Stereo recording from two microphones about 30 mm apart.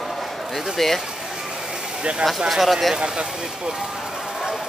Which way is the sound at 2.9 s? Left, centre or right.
Right.